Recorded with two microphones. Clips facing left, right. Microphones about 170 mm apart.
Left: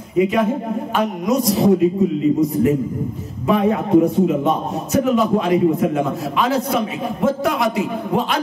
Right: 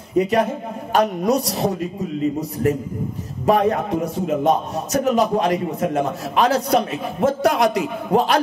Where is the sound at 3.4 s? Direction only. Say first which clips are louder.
Even; 40° right (ahead or behind).